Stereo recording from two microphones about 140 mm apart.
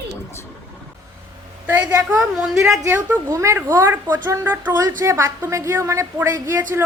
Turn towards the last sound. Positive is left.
turn(degrees=-15)  # may be behind; listen again after turning